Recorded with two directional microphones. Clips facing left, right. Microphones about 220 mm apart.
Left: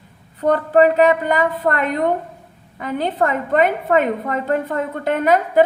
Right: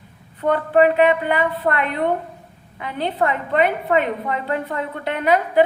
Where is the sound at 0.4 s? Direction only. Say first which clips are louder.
Left 2 dB; 40° left (ahead or behind).